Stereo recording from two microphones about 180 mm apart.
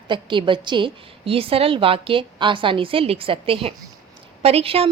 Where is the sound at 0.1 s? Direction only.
25° right (ahead or behind).